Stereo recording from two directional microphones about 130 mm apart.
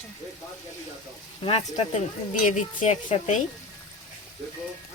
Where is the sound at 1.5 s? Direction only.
55° left (ahead or behind).